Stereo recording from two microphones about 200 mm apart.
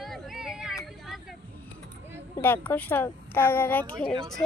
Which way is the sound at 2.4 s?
10° left (ahead or behind).